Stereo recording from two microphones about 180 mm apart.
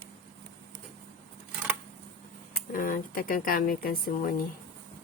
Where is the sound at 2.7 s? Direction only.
50° left (ahead or behind).